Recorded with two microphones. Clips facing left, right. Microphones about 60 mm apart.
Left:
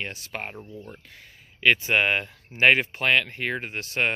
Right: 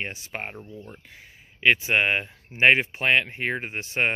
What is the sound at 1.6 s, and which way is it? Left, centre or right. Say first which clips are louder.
Speech: even; centre.